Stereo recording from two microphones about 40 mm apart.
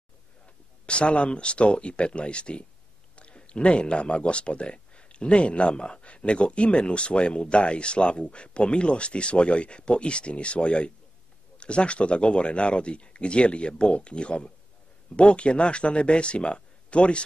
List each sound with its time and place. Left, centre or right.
0.8 s speech: left